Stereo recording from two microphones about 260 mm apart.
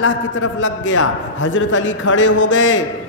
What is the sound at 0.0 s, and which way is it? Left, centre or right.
A man's voice, left.